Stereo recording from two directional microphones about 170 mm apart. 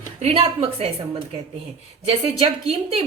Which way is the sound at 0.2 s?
35° right (ahead or behind).